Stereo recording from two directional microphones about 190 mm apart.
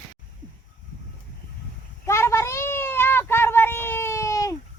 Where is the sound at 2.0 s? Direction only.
15° left (ahead or behind).